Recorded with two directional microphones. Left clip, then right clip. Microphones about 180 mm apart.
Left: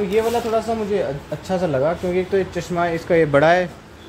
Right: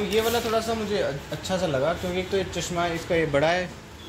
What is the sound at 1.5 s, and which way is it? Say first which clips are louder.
A man's voice: left 5 dB; 55° left (ahead or behind).